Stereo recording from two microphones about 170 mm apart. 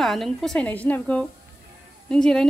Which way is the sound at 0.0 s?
Centre (ahead or behind).